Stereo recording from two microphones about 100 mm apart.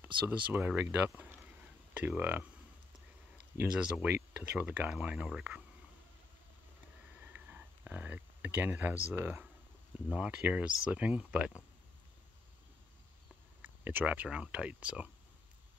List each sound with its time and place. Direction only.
0.0 s speech: 20° right (ahead or behind)
4.0 s speech: 15° right (ahead or behind)
7.2 s a sound: 15° right (ahead or behind)
10.0 s speech: 10° right (ahead or behind)
13.6 s speech: 15° right (ahead or behind)